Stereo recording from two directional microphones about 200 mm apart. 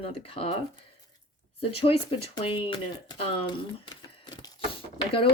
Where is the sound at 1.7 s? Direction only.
30° left (ahead or behind).